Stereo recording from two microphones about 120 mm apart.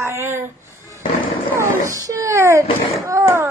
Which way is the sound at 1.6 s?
30° right (ahead or behind).